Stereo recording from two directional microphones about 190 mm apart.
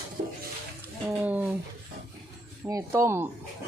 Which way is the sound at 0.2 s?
45° right (ahead or behind).